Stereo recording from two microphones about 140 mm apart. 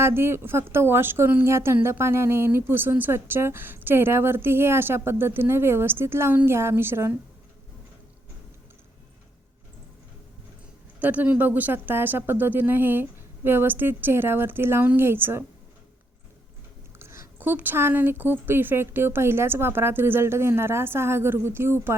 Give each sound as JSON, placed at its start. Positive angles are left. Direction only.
{"t": 0.0, "sound": "a woman's voice", "side_deg": -15}
{"t": 11.0, "sound": "a woman's voice", "side_deg": -10}
{"t": 17.0, "sound": "a woman's voice", "side_deg": -20}